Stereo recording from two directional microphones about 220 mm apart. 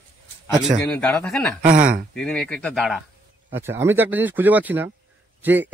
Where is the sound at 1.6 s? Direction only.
40° right (ahead or behind).